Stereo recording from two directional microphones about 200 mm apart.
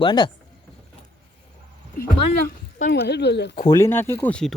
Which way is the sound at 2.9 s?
60° left (ahead or behind).